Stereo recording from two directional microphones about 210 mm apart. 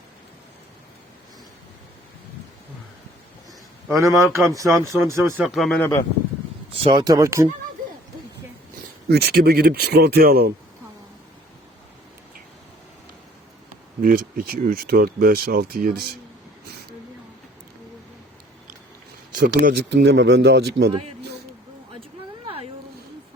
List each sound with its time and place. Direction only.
3.8 s speech: 15° right (ahead or behind)
5.5 s speech: 5° left (ahead or behind)
6.7 s speech: 25° right (ahead or behind)
9.0 s speech: 50° right (ahead or behind)
14.0 s speech: 45° right (ahead or behind)
19.3 s speech: 45° right (ahead or behind)
22.4 s a sound: 30° right (ahead or behind)